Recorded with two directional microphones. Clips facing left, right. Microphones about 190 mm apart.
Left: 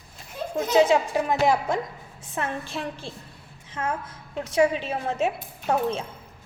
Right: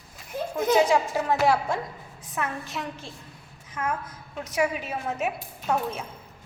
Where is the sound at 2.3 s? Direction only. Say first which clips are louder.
Left 2 dB; 30° left (ahead or behind).